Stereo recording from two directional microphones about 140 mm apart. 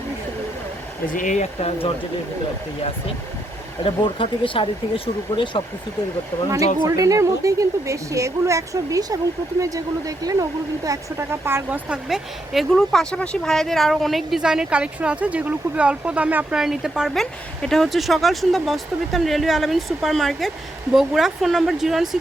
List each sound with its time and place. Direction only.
1.1 s speech: 65° left (ahead or behind)
3.8 s speech: 35° left (ahead or behind)
6.7 s a woman's voice: 25° right (ahead or behind)
12.0 s speech: centre (ahead or behind)